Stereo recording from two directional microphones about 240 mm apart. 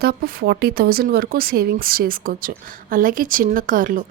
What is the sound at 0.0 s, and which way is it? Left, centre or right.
A woman's voice, right.